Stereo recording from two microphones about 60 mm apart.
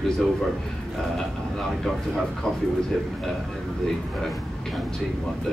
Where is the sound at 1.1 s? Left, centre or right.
Centre.